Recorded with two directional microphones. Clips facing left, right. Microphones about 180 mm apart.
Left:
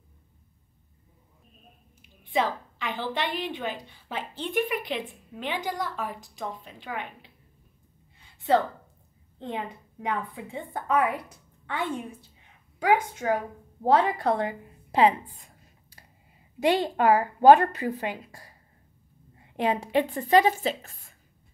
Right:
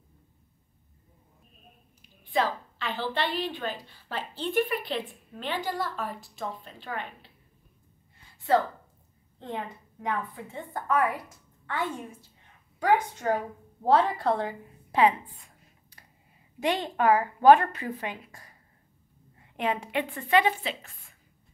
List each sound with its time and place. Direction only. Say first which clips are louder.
2.3 s a woman's voice: left 1 dB; 20° left (ahead or behind)
10.0 s a woman's voice: left 1 dB; 15° left (ahead or behind)
14.9 s a sound: left 2 dB; 35° left (ahead or behind)
16.5 s a woman's voice: left 4 dB; 35° left (ahead or behind)